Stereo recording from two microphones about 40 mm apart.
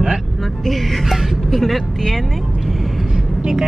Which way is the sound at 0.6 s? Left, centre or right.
Centre.